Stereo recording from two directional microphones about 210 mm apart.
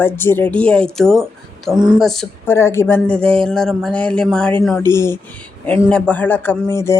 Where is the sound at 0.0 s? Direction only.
10° left (ahead or behind).